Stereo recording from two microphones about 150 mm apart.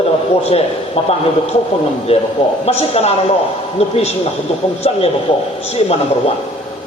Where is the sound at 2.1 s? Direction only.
40° left (ahead or behind).